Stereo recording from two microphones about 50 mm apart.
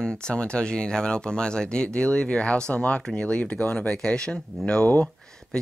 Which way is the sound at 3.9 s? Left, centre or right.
Centre.